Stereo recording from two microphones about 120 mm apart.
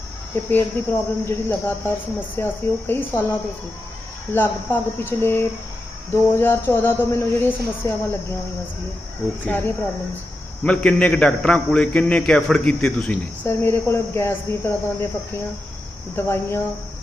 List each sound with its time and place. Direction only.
0.3 s a man's voice: 20° left (ahead or behind)
4.3 s speech: 20° left (ahead or behind)
10.6 s a man's voice: 10° left (ahead or behind)
16.1 s speech: 20° left (ahead or behind)